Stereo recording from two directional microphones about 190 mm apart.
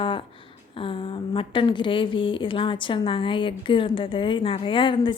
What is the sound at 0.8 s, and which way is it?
A woman's voice, 30° left (ahead or behind).